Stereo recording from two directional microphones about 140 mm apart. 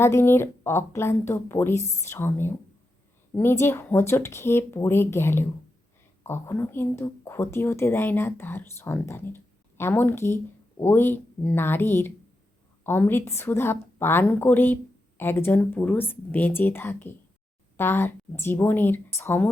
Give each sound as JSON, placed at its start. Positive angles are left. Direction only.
{"t": 0.0, "sound": "speech", "side_deg": 20}